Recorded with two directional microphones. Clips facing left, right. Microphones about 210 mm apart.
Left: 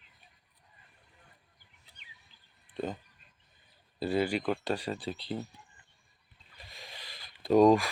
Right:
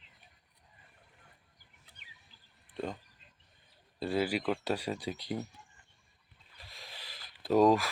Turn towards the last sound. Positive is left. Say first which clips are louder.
# left 3 dB
turn(degrees=-5)  # may be behind; listen again after turning